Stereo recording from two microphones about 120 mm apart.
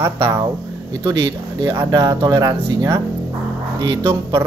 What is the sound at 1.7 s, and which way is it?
Speech, 25° right (ahead or behind).